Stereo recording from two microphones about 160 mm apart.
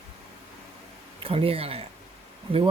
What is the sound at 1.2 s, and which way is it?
Speech, 35° right (ahead or behind).